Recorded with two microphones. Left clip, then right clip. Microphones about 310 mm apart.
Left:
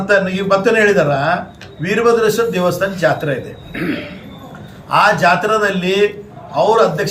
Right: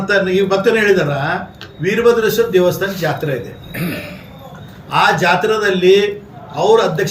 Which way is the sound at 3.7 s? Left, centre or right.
Right.